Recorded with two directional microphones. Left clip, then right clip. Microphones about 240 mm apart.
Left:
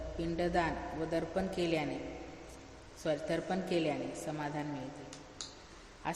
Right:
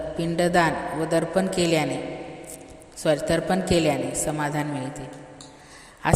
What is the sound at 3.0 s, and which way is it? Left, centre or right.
A woman's voice, right.